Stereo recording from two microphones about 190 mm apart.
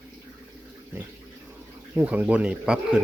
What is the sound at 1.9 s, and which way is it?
Speech, 10° right (ahead or behind).